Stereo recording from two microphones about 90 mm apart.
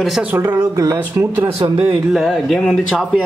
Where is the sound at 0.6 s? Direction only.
40° right (ahead or behind).